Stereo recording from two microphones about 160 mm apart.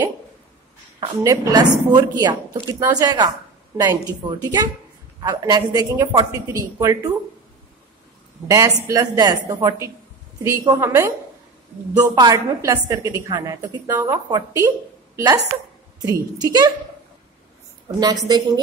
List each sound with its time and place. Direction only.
1.2 s a woman's voice: 20° right (ahead or behind)
8.5 s a woman's voice: 20° right (ahead or behind)
18.0 s a woman's voice: 25° right (ahead or behind)